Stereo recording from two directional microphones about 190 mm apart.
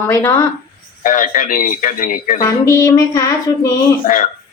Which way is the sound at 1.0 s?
45° left (ahead or behind).